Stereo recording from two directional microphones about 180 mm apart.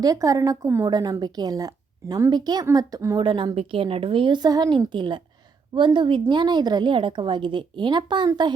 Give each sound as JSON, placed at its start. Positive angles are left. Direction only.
{"t": 0.0, "sound": "a woman's voice", "side_deg": -20}